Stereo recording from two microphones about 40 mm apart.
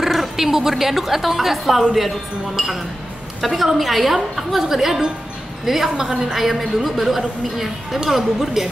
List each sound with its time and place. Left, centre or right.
0.0 s a woman's voice: centre
6.3 s a woman's voice: centre